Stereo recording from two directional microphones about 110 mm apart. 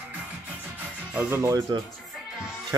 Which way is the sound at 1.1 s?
20° right (ahead or behind).